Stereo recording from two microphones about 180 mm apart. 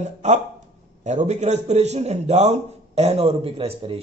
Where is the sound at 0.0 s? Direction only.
40° right (ahead or behind).